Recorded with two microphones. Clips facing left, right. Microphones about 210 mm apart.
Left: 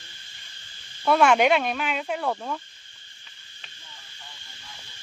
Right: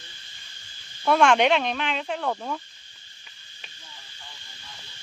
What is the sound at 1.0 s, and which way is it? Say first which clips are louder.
Speech: even; 5° left (ahead or behind).